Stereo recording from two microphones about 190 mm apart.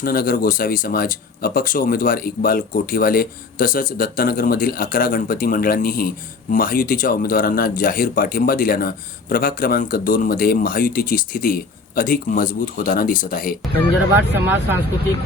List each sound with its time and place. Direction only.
0.0 s speech: 50° left (ahead or behind)
14.3 s speech: 10° right (ahead or behind)